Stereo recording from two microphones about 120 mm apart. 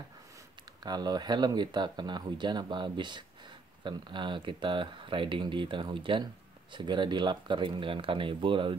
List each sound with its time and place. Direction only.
0.8 s speech: 35° right (ahead or behind)